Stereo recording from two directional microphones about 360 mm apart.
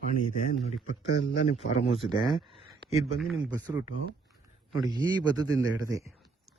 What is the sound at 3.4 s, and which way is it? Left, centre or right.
A man's voice, centre.